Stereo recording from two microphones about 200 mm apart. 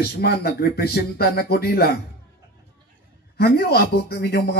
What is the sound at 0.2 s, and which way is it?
A man's voice, 50° left (ahead or behind).